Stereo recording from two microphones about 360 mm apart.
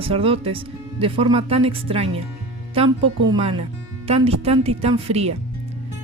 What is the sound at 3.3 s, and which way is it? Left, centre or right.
Speech, centre.